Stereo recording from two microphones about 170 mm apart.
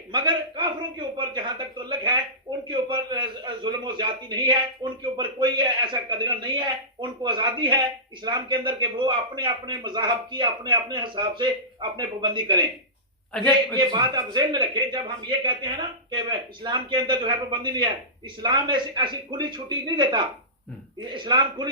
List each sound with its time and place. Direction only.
0.1 s a man's voice: 25° right (ahead or behind)
13.3 s a man's voice: 10° left (ahead or behind)
13.7 s a man's voice: 25° right (ahead or behind)